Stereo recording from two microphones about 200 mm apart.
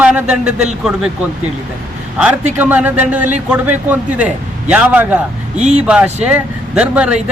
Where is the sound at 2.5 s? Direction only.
10° right (ahead or behind).